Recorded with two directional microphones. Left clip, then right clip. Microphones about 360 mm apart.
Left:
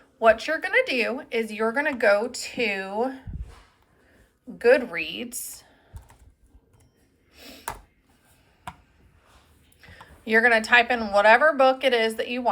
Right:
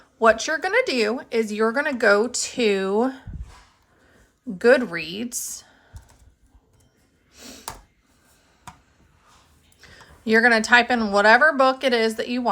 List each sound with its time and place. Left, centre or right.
0.2 s speech: centre
2.6 s speech: right
2.9 s speech: centre
5.2 s speech: centre
9.9 s speech: centre